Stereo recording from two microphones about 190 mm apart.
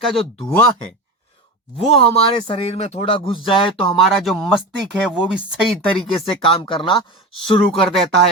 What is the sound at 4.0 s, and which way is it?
Speech, centre (ahead or behind).